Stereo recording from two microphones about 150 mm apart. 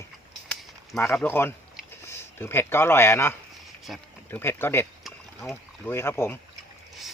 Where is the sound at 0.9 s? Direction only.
15° left (ahead or behind).